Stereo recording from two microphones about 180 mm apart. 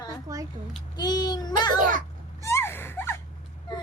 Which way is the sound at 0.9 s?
25° left (ahead or behind).